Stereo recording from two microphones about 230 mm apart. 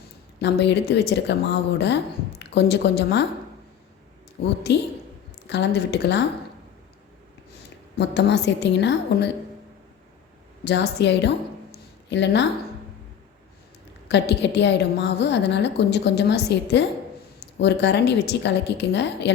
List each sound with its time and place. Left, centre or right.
0.3 s a woman's voice: left
4.4 s a woman's voice: left
7.9 s a woman's voice: left
10.6 s a sound: left
14.1 s a woman's voice: left